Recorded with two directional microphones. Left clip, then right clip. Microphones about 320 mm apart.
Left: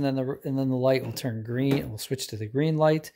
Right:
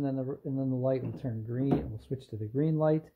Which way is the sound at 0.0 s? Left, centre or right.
Left.